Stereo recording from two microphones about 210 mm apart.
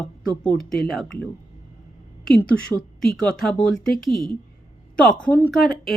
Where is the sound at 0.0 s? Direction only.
Centre (ahead or behind).